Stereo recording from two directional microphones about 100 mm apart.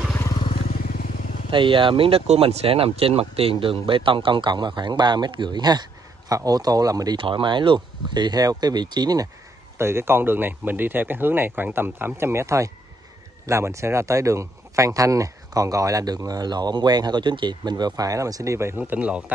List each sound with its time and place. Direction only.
1.5 s speech: 55° right (ahead or behind); by 7.2 s 35° right (ahead or behind)
7.2 s speech: 60° right (ahead or behind); by 9.3 s 40° right (ahead or behind)
9.8 s speech: 25° right (ahead or behind)